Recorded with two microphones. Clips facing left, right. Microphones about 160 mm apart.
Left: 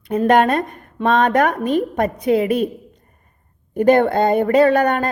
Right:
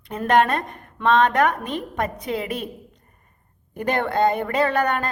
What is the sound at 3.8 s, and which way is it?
Speech, 45° left (ahead or behind).